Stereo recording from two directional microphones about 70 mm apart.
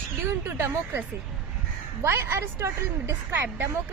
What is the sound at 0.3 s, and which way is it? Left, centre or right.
Speech, right.